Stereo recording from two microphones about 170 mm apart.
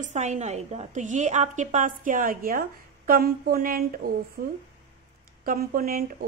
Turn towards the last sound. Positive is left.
turn(degrees=-55)  # may be behind; listen again after turning